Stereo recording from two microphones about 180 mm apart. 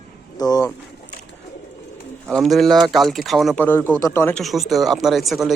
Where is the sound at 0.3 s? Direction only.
20° left (ahead or behind).